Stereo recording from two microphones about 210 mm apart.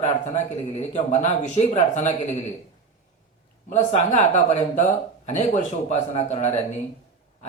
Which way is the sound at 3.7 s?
35° left (ahead or behind).